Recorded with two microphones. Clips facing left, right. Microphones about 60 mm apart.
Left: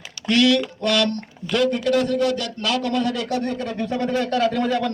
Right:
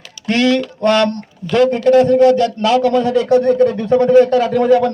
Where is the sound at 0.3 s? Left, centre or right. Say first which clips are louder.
Right 3 dB; right.